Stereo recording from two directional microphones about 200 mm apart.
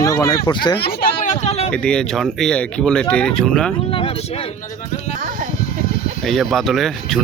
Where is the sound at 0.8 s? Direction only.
55° left (ahead or behind).